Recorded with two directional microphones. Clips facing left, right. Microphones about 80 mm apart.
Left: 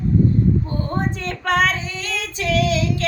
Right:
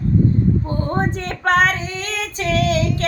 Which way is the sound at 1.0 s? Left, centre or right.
Right.